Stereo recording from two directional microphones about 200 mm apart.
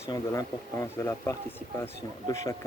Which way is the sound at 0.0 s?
15° left (ahead or behind).